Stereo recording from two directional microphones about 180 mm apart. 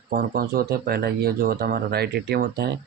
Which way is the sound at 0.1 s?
55° right (ahead or behind).